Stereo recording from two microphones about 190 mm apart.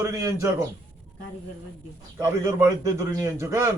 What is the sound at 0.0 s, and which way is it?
Speech, 15° right (ahead or behind).